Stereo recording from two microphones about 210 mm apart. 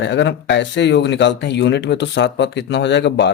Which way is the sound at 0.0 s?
60° left (ahead or behind).